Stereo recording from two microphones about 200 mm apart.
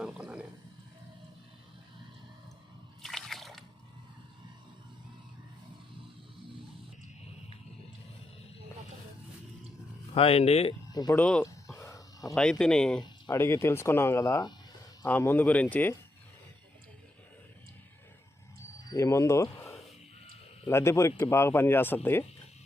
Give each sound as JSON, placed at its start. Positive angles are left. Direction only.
{"t": 0.0, "sound": "a sound", "side_deg": -5}
{"t": 3.0, "sound": "slosh", "side_deg": 0}
{"t": 10.2, "sound": "speech", "side_deg": 30}
{"t": 10.9, "sound": "speech", "side_deg": 20}
{"t": 11.2, "sound": "a sound", "side_deg": 5}
{"t": 12.3, "sound": "speech", "side_deg": 5}
{"t": 13.0, "sound": "speech", "side_deg": 15}
{"t": 18.9, "sound": "speech", "side_deg": 15}